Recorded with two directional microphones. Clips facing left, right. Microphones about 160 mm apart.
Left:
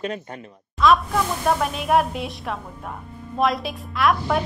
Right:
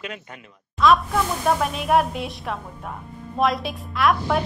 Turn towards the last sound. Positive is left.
turn(degrees=0)  # may be behind; listen again after turning